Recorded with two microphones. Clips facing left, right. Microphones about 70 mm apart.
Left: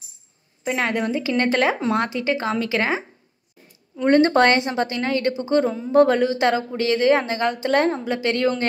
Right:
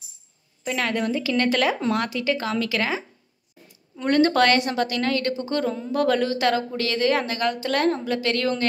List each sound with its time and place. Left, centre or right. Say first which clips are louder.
0.7 s a woman's voice: left 2 dB; left